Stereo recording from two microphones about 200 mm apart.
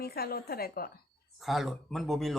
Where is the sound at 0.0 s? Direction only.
50° left (ahead or behind).